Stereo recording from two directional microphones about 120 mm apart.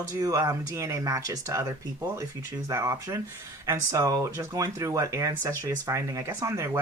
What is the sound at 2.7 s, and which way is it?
Speech, 25° right (ahead or behind).